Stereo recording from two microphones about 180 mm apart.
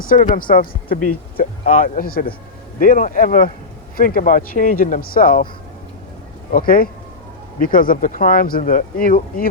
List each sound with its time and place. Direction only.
0.1 s speech: 50° left (ahead or behind)
6.5 s speech: 50° left (ahead or behind)